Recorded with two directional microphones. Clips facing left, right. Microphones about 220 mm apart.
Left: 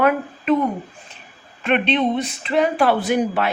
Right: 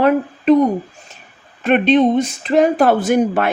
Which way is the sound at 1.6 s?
40° right (ahead or behind).